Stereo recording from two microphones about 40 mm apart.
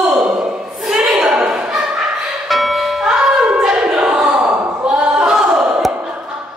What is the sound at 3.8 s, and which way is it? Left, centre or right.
Choir, right.